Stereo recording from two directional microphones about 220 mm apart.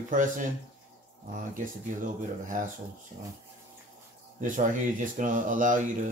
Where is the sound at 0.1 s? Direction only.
35° right (ahead or behind).